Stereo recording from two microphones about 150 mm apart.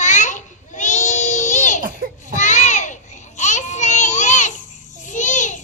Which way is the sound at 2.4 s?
55° left (ahead or behind).